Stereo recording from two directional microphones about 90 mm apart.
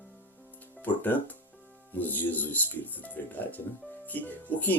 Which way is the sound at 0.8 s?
20° left (ahead or behind).